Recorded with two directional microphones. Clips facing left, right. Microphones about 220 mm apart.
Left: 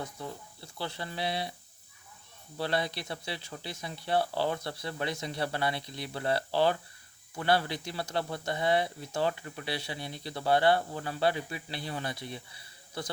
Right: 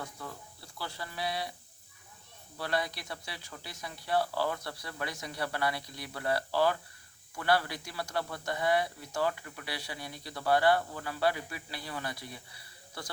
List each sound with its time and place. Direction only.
0.0 s a man's voice: 25° left (ahead or behind)
2.6 s a man's voice: 25° left (ahead or behind)